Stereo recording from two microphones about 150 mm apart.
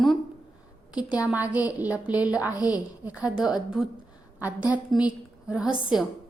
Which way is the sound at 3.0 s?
10° right (ahead or behind).